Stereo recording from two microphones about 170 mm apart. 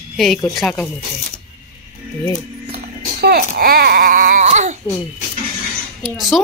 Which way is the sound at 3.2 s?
70° right (ahead or behind).